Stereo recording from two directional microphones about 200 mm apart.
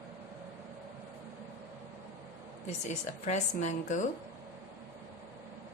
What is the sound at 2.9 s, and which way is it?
Speech, 35° left (ahead or behind).